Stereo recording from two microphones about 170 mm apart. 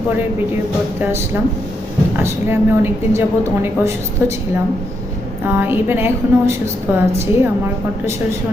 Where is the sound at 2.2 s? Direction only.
15° right (ahead or behind).